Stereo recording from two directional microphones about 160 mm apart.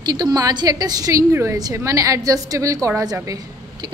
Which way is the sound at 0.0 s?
25° right (ahead or behind).